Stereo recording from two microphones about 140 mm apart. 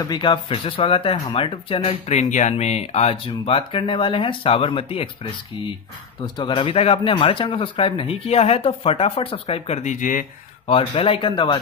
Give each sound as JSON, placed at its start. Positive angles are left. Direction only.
{"t": 0.0, "sound": "speech", "side_deg": 30}
{"t": 2.0, "sound": "speech", "side_deg": 60}
{"t": 10.7, "sound": "speech", "side_deg": 40}